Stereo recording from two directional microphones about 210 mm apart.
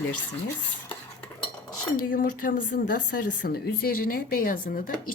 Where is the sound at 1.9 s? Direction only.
40° left (ahead or behind).